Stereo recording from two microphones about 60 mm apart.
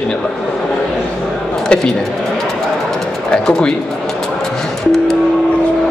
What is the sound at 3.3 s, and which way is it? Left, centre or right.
Speech, centre.